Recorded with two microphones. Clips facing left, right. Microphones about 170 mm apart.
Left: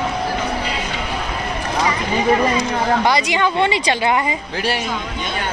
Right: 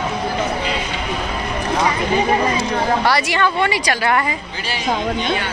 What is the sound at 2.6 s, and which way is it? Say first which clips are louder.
A woman's voice: even; 20° left (ahead or behind).